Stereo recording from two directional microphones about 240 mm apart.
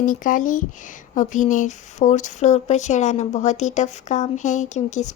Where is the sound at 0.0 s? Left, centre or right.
Left.